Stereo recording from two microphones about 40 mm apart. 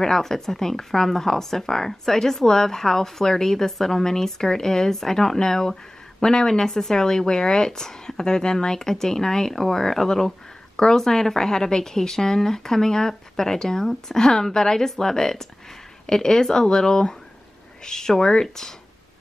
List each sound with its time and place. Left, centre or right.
0.0 s speech: centre